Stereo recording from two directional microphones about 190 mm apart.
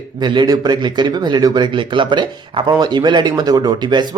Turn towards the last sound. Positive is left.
turn(degrees=-25)  # may be behind; listen again after turning